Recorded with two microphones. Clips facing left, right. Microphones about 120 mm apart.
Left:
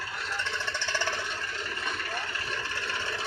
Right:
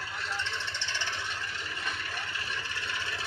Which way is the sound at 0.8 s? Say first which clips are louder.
Left 5 dB; 40° left (ahead or behind).